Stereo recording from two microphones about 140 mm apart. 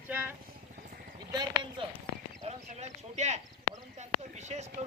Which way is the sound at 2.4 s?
55° right (ahead or behind).